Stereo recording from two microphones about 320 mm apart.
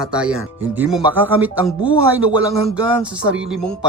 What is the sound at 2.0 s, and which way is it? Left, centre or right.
Speech, right.